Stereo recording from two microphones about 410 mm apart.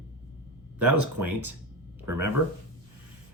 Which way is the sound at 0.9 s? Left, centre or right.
Right.